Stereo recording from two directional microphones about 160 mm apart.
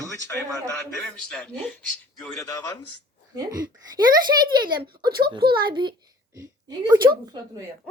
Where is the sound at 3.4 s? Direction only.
25° right (ahead or behind).